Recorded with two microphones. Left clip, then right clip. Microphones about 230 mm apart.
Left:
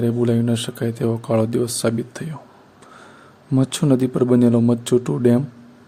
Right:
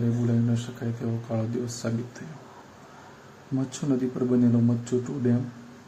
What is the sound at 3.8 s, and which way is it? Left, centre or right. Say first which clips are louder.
Speech: left 8 dB; left.